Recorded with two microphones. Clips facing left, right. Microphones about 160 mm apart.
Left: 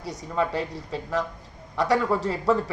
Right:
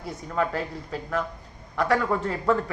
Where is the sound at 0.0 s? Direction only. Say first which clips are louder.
Left 1 dB; 80° left.